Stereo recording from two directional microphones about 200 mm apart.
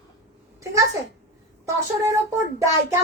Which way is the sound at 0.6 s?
15° right (ahead or behind).